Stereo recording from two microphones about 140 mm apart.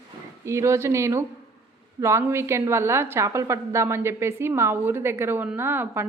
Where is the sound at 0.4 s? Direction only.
20° right (ahead or behind).